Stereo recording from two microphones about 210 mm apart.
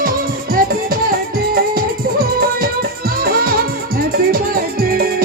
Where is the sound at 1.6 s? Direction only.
45° right (ahead or behind).